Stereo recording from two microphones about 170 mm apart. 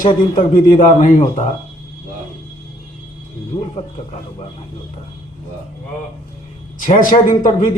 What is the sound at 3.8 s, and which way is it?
Speech, 35° left (ahead or behind).